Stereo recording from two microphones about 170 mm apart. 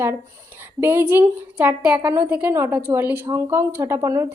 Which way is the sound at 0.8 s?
15° right (ahead or behind).